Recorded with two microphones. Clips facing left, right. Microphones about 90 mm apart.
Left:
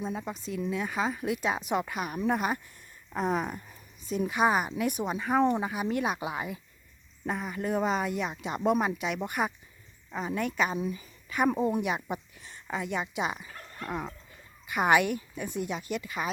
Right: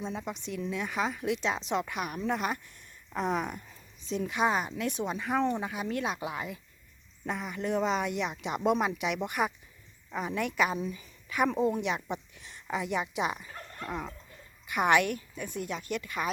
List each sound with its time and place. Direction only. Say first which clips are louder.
0.0 s a woman's voice: left 2 dB; 5° left (ahead or behind)
5.4 s a woman's voice: left 6 dB; 15° left (ahead or behind)